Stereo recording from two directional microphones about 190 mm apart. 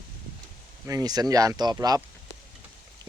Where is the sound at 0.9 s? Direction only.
20° right (ahead or behind).